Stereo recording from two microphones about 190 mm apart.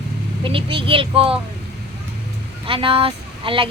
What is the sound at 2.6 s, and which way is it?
Speech, 30° right (ahead or behind).